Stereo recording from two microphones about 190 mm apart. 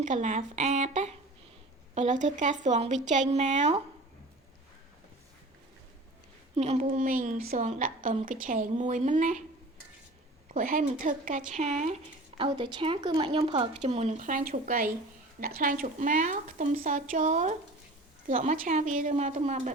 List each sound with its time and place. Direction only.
0.0 s a woman's voice: 40° right (ahead or behind)
6.6 s a woman's voice: 35° right (ahead or behind)
10.5 s speech: 45° right (ahead or behind)
12.4 s a woman's voice: 25° right (ahead or behind); by 19.7 s 40° right (ahead or behind)